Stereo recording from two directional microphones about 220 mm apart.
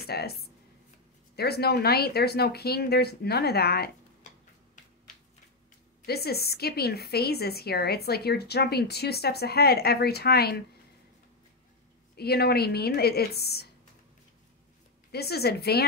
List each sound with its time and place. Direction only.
0.0 s a woman's voice: 45° left (ahead or behind)
6.0 s a woman's voice: 45° left (ahead or behind)
12.2 s a woman's voice: 45° left (ahead or behind)
15.0 s a woman's voice: 45° left (ahead or behind)